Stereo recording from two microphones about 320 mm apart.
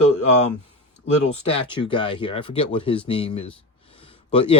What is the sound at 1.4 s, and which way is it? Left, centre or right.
Speech, centre.